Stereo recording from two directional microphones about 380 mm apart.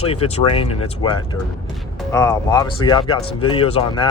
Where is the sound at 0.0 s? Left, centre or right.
Centre.